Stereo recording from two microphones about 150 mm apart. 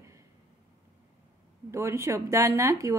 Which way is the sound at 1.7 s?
20° right (ahead or behind).